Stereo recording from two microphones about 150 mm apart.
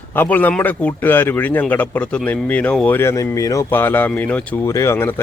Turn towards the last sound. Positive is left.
turn(degrees=15)  # may be behind; listen again after turning